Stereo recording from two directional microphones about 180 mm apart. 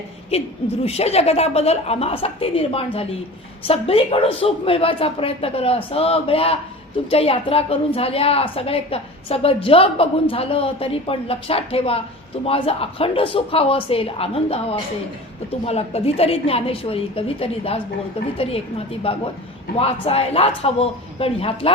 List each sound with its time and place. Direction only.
0.3 s a woman's voice: 35° left (ahead or behind)